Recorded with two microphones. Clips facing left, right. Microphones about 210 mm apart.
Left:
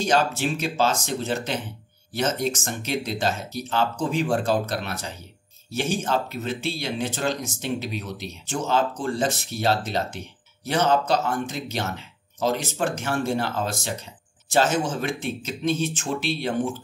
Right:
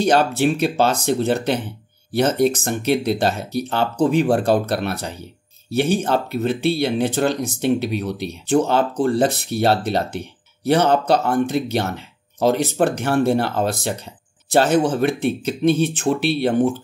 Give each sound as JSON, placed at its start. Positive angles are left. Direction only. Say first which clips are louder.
{"t": 0.0, "sound": "speech", "louder": "right 6 dB", "side_deg": -60}